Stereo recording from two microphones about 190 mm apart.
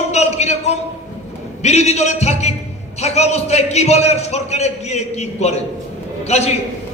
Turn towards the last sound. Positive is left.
turn(degrees=35)  # may be behind; listen again after turning